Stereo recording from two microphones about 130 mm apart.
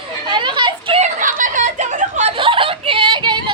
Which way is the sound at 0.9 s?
75° right (ahead or behind).